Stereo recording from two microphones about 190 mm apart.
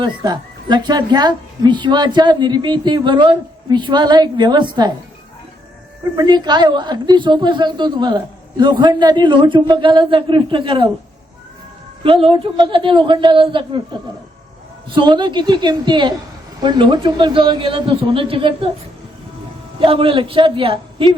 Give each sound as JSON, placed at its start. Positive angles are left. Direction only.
{"t": 0.0, "sound": "a woman's voice", "side_deg": -20}
{"t": 6.1, "sound": "a woman's voice", "side_deg": -25}
{"t": 12.0, "sound": "a woman's voice", "side_deg": -25}
{"t": 14.8, "sound": "a woman's voice", "side_deg": -25}
{"t": 19.8, "sound": "a woman's voice", "side_deg": -30}